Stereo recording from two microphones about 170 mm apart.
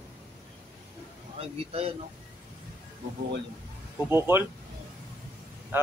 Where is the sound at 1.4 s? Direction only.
35° right (ahead or behind).